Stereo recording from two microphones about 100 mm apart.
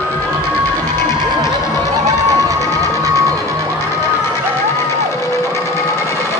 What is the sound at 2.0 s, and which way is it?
Music, 35° right (ahead or behind).